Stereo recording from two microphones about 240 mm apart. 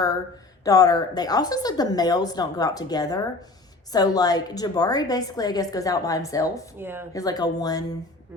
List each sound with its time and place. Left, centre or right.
0.6 s a woman's voice: centre
6.7 s speech: centre
7.1 s a woman's voice: centre